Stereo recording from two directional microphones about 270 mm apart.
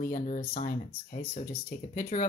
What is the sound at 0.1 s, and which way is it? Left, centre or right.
Speech, left.